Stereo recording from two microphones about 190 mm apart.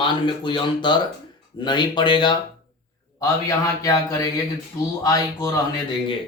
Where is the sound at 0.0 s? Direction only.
25° left (ahead or behind).